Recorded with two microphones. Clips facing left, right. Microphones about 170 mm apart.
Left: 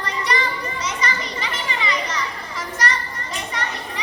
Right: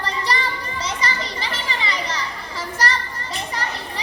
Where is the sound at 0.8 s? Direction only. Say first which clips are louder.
Right 1 dB; 30° right (ahead or behind).